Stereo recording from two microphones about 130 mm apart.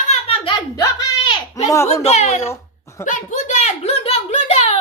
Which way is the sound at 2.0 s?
60° left (ahead or behind).